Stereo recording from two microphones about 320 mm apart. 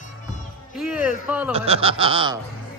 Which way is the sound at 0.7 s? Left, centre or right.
Centre.